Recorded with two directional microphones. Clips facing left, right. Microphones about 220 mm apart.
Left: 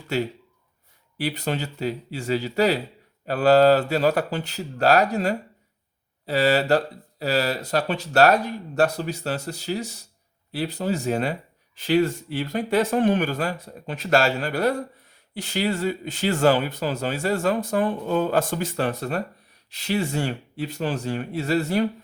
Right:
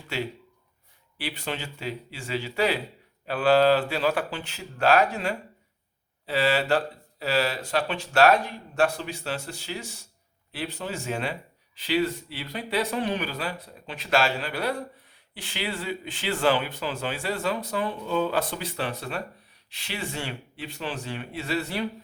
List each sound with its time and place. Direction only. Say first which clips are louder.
0.1 s speech: left 6 dB; 40° left (ahead or behind)